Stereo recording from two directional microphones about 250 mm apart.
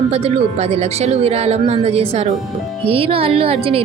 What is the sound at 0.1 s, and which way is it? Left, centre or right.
A woman's voice, right.